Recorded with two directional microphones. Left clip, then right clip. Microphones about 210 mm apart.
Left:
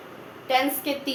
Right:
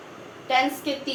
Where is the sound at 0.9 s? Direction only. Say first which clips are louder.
Even; 25° left (ahead or behind).